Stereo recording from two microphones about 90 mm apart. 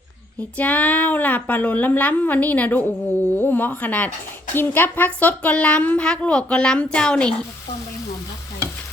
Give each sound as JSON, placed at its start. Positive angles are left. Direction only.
{"t": 0.5, "sound": "a woman's voice", "side_deg": 15}